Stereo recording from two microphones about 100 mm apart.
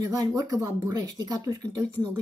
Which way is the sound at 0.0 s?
40° right (ahead or behind).